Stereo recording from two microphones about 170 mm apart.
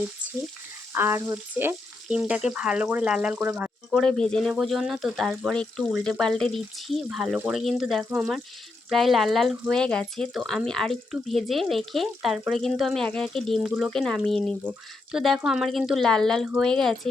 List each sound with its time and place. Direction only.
0.9 s frying: 15° right (ahead or behind)
3.9 s speech: 5° left (ahead or behind)
14.6 s frying: 10° right (ahead or behind)
15.2 s speech: centre (ahead or behind)